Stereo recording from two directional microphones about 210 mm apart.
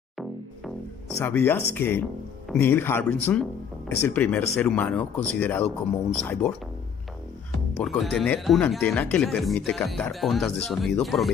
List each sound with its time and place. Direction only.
1.2 s speech: 10° left (ahead or behind)
7.7 s speech: centre (ahead or behind)